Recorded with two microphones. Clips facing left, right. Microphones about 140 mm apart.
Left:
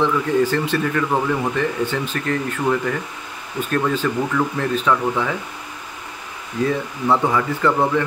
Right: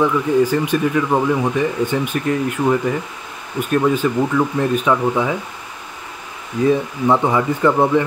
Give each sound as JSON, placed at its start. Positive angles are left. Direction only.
{"t": 0.0, "sound": "speech", "side_deg": -10}
{"t": 7.1, "sound": "speech", "side_deg": -20}